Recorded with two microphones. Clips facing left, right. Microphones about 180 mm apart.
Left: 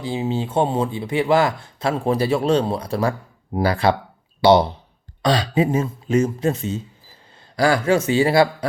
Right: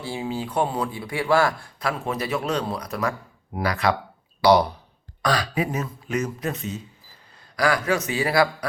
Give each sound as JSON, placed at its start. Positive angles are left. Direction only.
{"t": 0.0, "sound": "speech", "side_deg": 20}